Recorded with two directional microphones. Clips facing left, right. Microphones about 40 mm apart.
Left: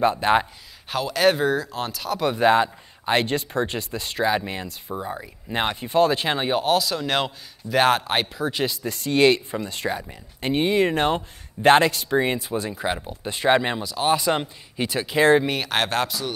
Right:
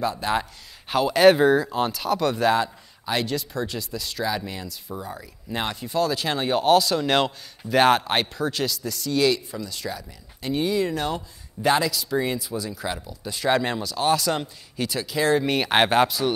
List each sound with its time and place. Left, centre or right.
0.0 s speech: left
0.8 s speech: centre
2.2 s speech: centre
6.5 s speech: centre
8.6 s speech: left
13.6 s speech: centre
14.1 s speech: left
15.6 s speech: centre